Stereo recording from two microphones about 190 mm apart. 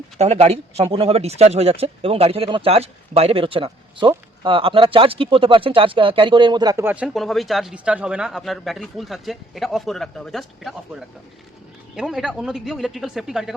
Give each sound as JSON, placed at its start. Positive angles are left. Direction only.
{"t": 0.2, "sound": "speech", "side_deg": -35}
{"t": 11.9, "sound": "speech", "side_deg": 0}